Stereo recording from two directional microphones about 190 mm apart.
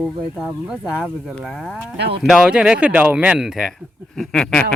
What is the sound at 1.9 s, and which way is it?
Speech, 60° right (ahead or behind).